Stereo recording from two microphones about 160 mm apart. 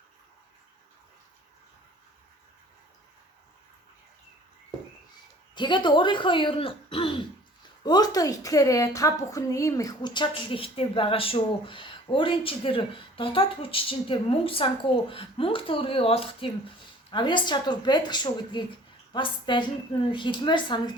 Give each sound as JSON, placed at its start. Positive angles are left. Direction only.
{"t": 5.5, "sound": "a woman's voice", "side_deg": 30}